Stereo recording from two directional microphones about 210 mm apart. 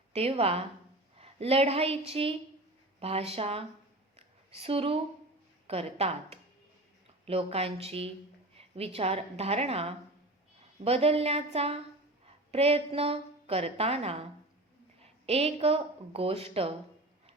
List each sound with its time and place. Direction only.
0.1 s a woman's voice: 30° right (ahead or behind)
4.2 s a sound: 30° right (ahead or behind)
5.6 s a woman's voice: 30° right (ahead or behind)